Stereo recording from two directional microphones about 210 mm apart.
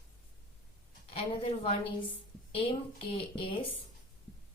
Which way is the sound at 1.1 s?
30° left (ahead or behind).